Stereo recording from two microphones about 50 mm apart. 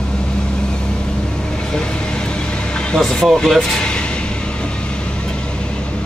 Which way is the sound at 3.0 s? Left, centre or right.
Centre.